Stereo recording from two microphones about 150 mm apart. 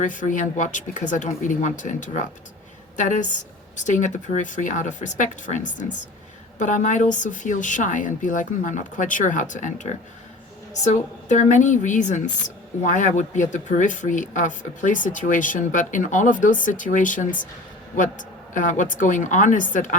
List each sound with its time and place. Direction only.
0.0 s speech: 60° left (ahead or behind)